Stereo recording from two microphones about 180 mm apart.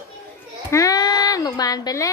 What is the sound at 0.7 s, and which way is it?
Speech, 20° left (ahead or behind).